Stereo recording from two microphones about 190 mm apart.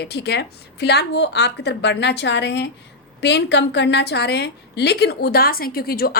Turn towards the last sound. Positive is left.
turn(degrees=50)  # may be behind; listen again after turning